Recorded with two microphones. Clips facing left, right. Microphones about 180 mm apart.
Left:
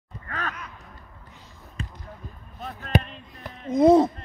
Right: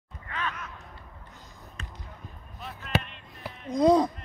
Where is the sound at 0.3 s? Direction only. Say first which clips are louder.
Left 1 dB; 45° left (ahead or behind).